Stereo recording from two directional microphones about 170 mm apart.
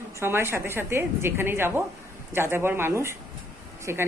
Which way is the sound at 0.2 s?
15° right (ahead or behind).